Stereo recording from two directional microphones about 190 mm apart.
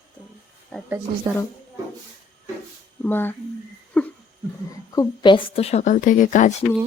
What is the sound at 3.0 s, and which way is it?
Speech, 10° left (ahead or behind).